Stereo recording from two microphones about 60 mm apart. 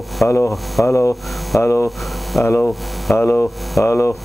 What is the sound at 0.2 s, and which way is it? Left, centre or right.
Speech, left.